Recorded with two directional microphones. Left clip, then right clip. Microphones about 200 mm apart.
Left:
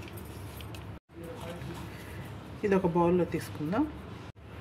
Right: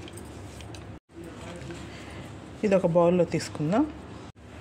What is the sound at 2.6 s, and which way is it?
Speech, 40° right (ahead or behind).